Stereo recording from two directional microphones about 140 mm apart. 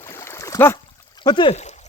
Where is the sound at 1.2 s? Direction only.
35° left (ahead or behind).